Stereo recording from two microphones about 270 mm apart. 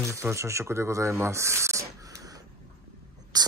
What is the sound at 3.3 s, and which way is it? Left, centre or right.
Speech, centre.